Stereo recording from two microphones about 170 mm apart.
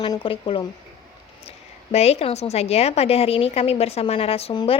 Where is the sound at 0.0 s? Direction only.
30° left (ahead or behind).